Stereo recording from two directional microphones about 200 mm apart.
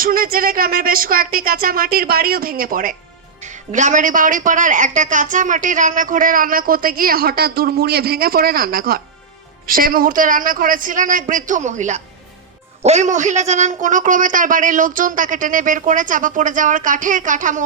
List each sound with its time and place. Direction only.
0.0 s a man's voice: 45° right (ahead or behind)